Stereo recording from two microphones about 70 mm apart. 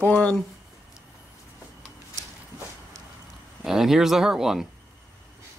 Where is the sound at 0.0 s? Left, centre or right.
Centre.